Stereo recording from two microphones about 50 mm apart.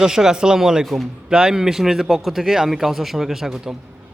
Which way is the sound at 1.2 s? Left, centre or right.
Centre.